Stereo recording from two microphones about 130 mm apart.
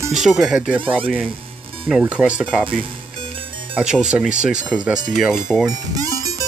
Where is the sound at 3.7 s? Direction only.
5° right (ahead or behind).